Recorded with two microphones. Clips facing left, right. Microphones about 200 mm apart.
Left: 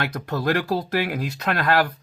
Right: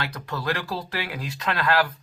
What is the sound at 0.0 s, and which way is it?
Speech, 45° left (ahead or behind).